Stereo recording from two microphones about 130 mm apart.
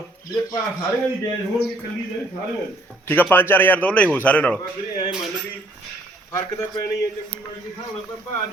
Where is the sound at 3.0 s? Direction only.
15° left (ahead or behind).